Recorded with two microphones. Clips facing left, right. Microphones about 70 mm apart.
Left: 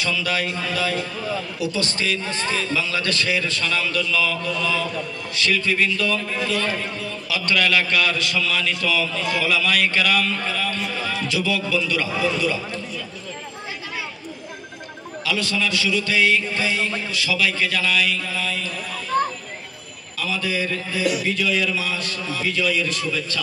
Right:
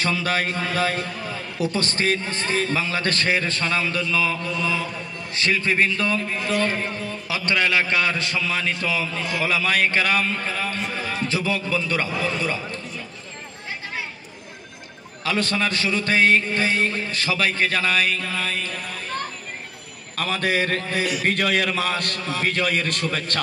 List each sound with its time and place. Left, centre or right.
0.0 s a man's voice: right
15.2 s a man's voice: right
20.2 s a man's voice: right